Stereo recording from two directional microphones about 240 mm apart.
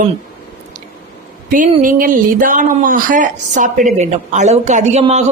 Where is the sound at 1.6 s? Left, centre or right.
Right.